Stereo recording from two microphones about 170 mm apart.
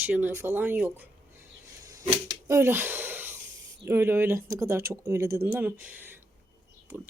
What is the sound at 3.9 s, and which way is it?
Speech, 15° right (ahead or behind).